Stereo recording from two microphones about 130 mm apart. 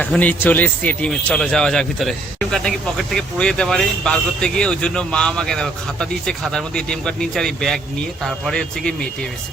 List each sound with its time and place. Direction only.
0.0 s speech: 10° left (ahead or behind)